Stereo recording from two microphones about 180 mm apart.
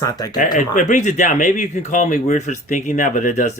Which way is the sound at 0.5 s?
45° left (ahead or behind).